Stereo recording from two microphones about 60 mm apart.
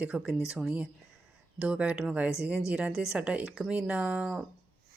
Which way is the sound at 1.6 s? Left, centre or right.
Centre.